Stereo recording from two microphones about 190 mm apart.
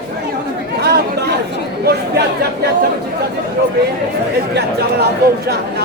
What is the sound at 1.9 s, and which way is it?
Speech, 55° right (ahead or behind).